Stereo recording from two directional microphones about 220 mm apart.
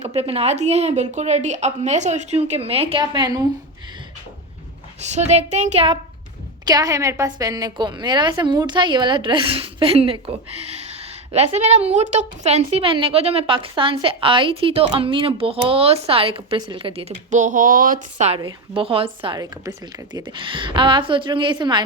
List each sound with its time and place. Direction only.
0.1 s a woman's voice: 25° right (ahead or behind)
4.9 s a woman's voice: 30° right (ahead or behind)
6.7 s a woman's voice: 15° right (ahead or behind); by 18.3 s 35° right (ahead or behind)
18.3 s a woman's voice: 20° right (ahead or behind)